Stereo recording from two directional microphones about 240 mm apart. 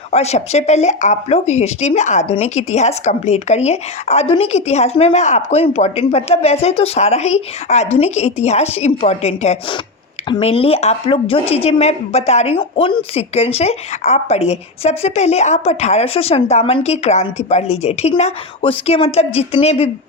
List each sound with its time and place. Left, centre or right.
0.1 s speech: left